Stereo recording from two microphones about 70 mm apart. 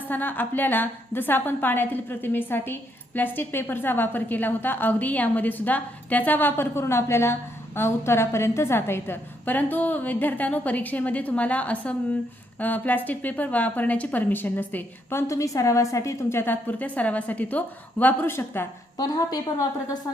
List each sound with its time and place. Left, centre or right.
0.1 s a woman's voice: left
15.3 s a woman's voice: left
16.4 s a woman's voice: left
18.9 s a woman's voice: left